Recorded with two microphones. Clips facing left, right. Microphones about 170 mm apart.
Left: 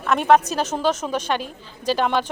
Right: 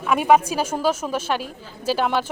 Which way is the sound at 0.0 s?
10° right (ahead or behind).